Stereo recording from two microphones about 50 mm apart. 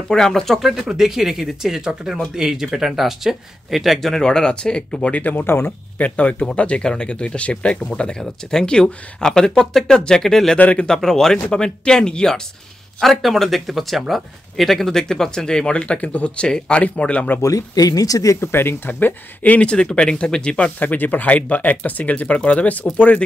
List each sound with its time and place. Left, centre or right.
0.1 s speech: centre
0.6 s speech: centre
4.2 s speech: centre
5.1 s speech: left
5.9 s speech: left; by 10.6 s centre
10.6 s speech: left
10.9 s speech: centre
13.0 s speech: centre; by 17.3 s left
18.4 s speech: left
19.6 s speech: centre
20.8 s speech: left